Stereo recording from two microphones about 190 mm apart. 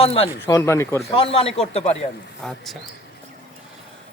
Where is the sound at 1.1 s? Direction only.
30° left (ahead or behind).